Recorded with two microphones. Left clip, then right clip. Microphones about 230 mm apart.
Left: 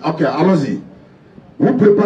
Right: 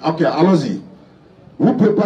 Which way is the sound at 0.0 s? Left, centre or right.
Right.